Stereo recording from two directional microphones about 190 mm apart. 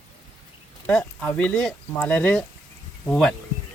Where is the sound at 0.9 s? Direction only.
5° left (ahead or behind).